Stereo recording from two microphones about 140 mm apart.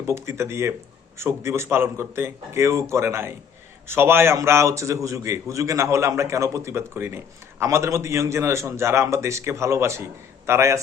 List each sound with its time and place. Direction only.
0.1 s a man's voice: 20° right (ahead or behind)